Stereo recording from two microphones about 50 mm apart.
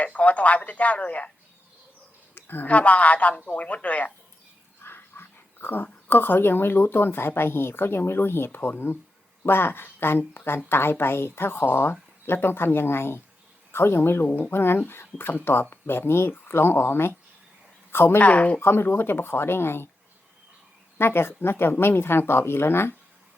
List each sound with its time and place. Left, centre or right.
0.0 s a woman's voice: left
2.3 s a sound: left
2.6 s a woman's voice: left
4.8 s speech: left
14.3 s a woman's voice: left
14.5 s speech: left
18.2 s a woman's voice: left
18.6 s speech: left
21.0 s speech: left